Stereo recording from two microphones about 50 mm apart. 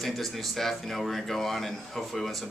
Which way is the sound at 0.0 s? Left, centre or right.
Centre.